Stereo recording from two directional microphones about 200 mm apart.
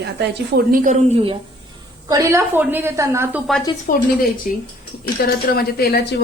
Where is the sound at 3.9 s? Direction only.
45° left (ahead or behind).